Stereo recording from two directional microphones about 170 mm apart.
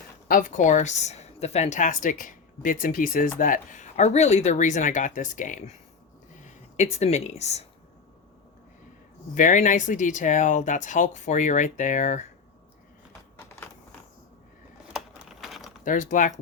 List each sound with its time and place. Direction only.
0.3 s a woman's voice: 50° left (ahead or behind)
9.3 s a woman's voice: 50° left (ahead or behind)
14.9 s computer keyboard: centre (ahead or behind)
15.8 s a woman's voice: 50° left (ahead or behind)